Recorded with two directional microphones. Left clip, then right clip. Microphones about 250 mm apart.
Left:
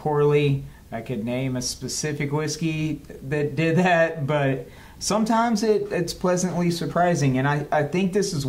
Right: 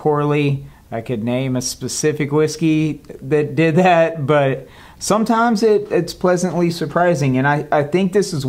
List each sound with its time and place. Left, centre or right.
0.0 s speech: right